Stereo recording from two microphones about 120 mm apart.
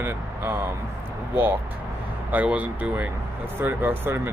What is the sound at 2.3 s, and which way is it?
Speech, 10° right (ahead or behind).